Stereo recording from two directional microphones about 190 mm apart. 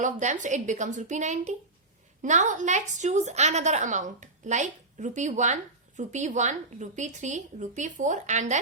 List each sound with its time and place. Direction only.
0.0 s a woman's voice: 40° right (ahead or behind)